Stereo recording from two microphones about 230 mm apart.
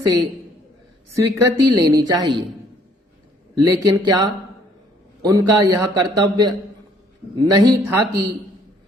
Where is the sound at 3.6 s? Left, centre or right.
Centre.